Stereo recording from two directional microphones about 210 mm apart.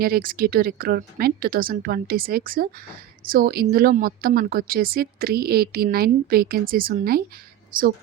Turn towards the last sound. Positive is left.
turn(degrees=-40)  # may be behind; listen again after turning